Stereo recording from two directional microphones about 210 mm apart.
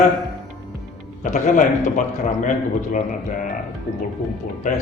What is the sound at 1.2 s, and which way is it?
Speech, 35° left (ahead or behind).